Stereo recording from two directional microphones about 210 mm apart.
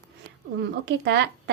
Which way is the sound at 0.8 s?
55° right (ahead or behind).